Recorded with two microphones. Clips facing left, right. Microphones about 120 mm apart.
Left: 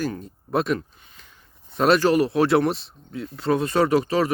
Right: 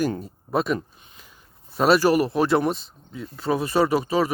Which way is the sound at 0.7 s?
20° right (ahead or behind).